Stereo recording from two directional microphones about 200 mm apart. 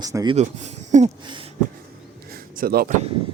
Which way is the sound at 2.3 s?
45° right (ahead or behind).